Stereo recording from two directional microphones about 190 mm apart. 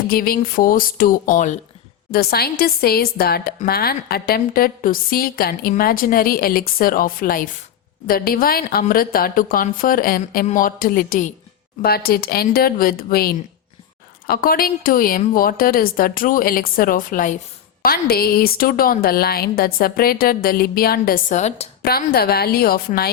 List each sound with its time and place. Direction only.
0.1 s a woman's voice: 50° left (ahead or behind)
2.0 s a woman's voice: 55° left (ahead or behind); by 21.7 s 40° left (ahead or behind)
21.8 s a woman's voice: 55° left (ahead or behind)